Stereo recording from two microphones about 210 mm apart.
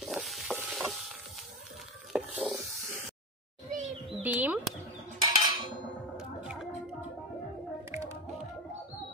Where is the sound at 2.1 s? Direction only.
5° right (ahead or behind).